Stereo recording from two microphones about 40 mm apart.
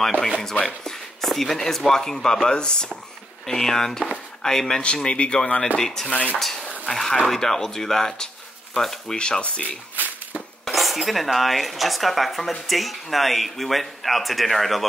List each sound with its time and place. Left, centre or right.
0.2 s speech: centre
5.0 s speech: left
10.7 s cutlery: centre
11.3 s speech: centre